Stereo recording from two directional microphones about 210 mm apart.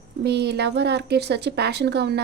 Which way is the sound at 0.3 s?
50° right (ahead or behind).